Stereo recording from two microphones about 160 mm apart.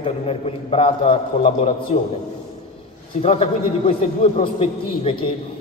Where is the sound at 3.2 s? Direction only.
40° left (ahead or behind).